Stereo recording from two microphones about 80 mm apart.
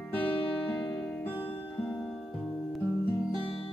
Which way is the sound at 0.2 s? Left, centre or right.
Left.